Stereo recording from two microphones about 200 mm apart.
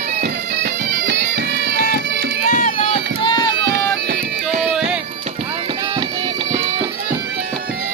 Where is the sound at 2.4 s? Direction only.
40° left (ahead or behind).